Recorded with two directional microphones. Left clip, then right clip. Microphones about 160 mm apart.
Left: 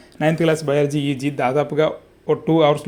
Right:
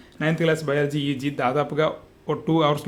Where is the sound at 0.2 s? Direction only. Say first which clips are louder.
Left 4 dB; 20° left (ahead or behind).